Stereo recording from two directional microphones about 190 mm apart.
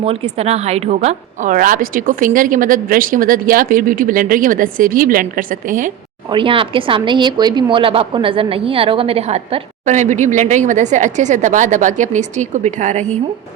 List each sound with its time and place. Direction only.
0.0 s a woman's voice: 30° right (ahead or behind)
6.3 s a woman's voice: 25° right (ahead or behind)